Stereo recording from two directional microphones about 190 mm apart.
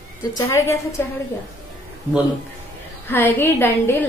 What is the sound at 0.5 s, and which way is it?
Speech, 15° left (ahead or behind).